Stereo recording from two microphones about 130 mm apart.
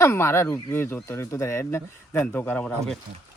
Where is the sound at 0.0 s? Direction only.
20° left (ahead or behind).